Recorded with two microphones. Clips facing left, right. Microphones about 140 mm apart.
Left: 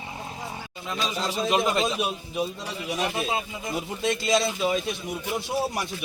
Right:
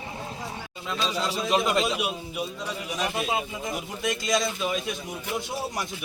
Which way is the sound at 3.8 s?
25° left (ahead or behind).